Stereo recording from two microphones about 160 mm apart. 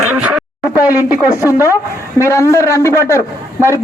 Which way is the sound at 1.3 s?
20° left (ahead or behind).